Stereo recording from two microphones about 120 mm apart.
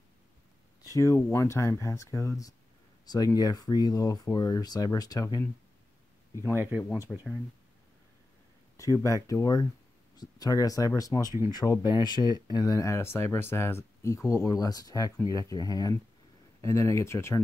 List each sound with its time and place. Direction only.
0.8 s speech: 25° left (ahead or behind)
6.5 s speech: 15° right (ahead or behind)
7.1 s speech: 5° left (ahead or behind)
8.7 s speech: 25° left (ahead or behind)